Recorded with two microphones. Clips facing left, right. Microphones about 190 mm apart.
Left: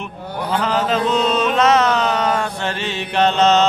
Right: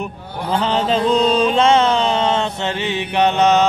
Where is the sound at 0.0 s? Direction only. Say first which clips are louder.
Even; 30° right (ahead or behind).